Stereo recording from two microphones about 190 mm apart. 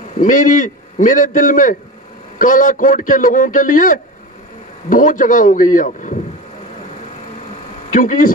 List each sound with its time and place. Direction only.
0.2 s a man's voice: 45° left (ahead or behind)
7.9 s speech: 45° left (ahead or behind)